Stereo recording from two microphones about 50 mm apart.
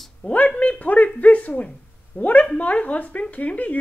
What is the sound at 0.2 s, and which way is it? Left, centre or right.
Speech, left.